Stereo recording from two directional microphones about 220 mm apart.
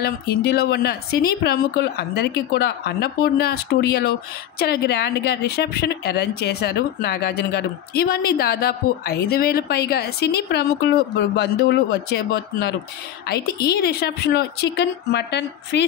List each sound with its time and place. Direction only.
0.0 s speech: 45° left (ahead or behind)